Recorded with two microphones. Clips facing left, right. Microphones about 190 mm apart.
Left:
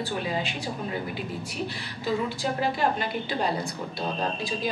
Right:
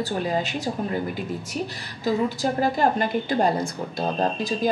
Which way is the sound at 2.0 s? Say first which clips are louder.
Right 5 dB; 45° right (ahead or behind).